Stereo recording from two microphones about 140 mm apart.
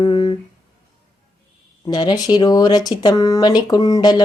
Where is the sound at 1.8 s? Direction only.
30° left (ahead or behind).